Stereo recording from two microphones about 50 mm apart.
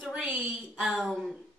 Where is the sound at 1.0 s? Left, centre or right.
Centre.